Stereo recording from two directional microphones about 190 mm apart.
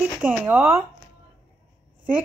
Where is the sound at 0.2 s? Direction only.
10° right (ahead or behind).